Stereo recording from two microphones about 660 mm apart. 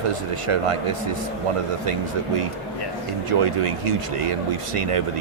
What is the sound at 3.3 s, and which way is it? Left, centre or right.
Speech, right.